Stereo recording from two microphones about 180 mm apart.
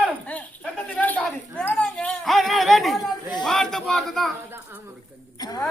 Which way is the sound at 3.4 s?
5° left (ahead or behind).